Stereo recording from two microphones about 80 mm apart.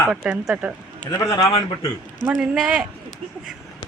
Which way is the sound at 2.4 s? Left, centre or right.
Centre.